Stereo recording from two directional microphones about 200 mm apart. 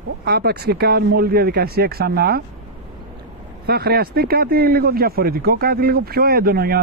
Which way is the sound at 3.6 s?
50° right (ahead or behind).